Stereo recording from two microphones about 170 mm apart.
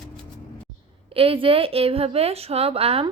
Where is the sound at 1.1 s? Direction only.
35° right (ahead or behind).